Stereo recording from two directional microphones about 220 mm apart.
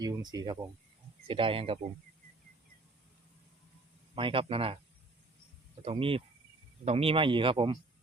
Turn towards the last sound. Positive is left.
turn(degrees=-20)  # may be behind; listen again after turning